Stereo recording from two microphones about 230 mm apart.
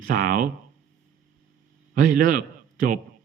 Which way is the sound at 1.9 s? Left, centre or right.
Right.